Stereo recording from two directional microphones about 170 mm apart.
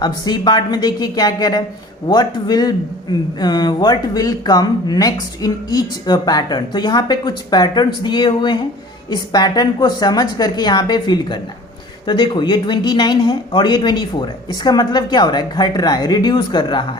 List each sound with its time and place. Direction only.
0.0 s a man's voice: 25° left (ahead or behind)